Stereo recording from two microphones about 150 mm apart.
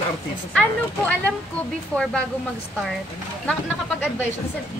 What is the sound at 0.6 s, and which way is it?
Speech, 10° left (ahead or behind).